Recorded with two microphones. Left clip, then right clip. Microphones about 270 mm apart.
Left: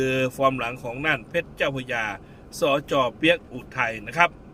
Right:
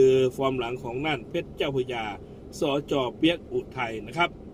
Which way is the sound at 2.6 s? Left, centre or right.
Left.